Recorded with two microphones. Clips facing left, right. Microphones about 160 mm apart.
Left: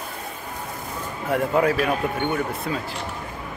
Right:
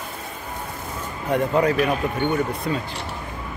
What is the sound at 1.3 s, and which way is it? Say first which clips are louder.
Speech: right 1 dB; 5° left (ahead or behind).